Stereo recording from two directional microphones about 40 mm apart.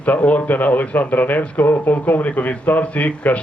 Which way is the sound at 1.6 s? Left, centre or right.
Left.